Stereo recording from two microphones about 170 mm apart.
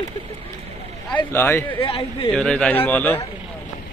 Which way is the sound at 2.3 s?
5° left (ahead or behind).